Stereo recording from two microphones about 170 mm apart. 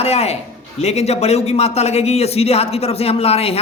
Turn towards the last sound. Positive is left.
turn(degrees=35)  # may be behind; listen again after turning